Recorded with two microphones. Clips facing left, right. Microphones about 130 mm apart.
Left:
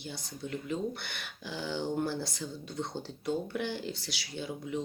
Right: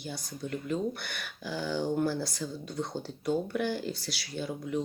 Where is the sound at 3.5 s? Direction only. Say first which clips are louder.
Right 4 dB; 50° right (ahead or behind).